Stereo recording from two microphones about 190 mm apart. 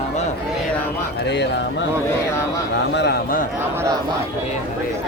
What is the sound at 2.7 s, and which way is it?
Speech, 65° left (ahead or behind).